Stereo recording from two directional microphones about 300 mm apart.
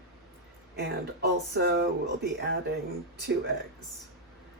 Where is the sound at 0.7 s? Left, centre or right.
Right.